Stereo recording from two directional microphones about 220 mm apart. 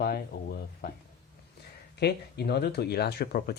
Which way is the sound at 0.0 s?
45° left (ahead or behind).